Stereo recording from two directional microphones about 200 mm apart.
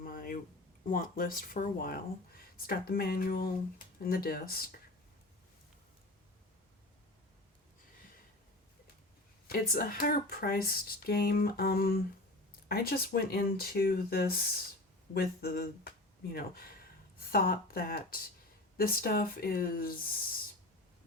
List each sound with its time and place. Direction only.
0.0 s a sound: 45° left (ahead or behind)
0.9 s speech: 45° left (ahead or behind)
9.5 s speech: 45° left (ahead or behind)